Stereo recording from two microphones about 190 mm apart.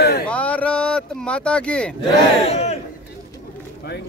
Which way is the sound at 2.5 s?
35° left (ahead or behind).